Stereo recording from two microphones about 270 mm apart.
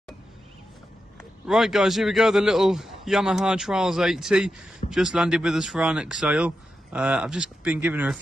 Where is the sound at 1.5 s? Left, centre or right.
Centre.